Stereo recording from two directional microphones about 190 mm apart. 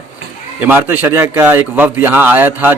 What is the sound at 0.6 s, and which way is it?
Speech, 10° right (ahead or behind).